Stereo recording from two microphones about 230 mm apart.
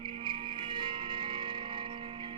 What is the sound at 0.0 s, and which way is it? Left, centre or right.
Music, right.